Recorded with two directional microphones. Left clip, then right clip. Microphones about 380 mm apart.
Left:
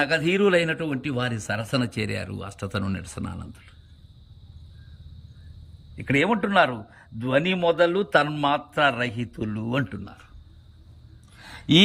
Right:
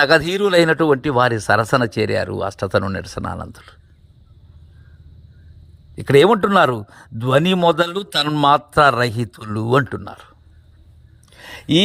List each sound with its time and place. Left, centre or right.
0.0 s speech: centre
6.0 s speech: centre
11.3 s a sound: centre